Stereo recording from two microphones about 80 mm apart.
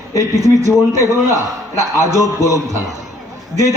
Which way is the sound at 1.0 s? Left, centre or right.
Left.